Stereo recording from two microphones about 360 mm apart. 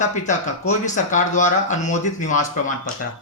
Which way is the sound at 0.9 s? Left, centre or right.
Centre.